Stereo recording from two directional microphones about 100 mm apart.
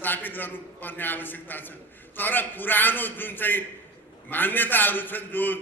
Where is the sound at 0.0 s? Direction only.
20° left (ahead or behind).